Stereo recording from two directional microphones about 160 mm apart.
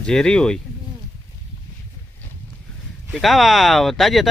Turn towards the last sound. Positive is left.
turn(degrees=0)  # may be behind; listen again after turning